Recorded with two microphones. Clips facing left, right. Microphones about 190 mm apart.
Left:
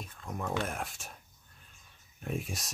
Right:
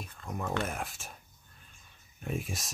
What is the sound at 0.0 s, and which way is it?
Speech, centre (ahead or behind).